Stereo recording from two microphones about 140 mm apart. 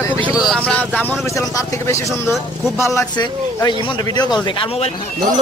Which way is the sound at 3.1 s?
30° left (ahead or behind).